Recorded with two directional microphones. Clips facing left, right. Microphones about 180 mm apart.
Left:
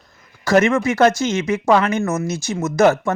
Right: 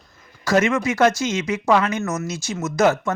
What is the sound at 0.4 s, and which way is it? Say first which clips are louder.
Speech: left 3 dB; 55° left (ahead or behind).